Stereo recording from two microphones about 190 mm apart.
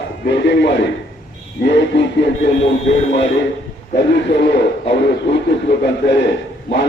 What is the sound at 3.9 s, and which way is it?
Speech, 65° left (ahead or behind).